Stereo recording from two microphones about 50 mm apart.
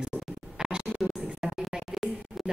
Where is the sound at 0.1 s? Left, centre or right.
Left.